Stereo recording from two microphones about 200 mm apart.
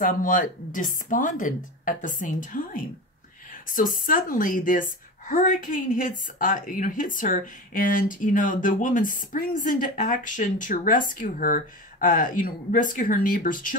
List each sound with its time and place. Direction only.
0.0 s a woman's voice: 40° left (ahead or behind)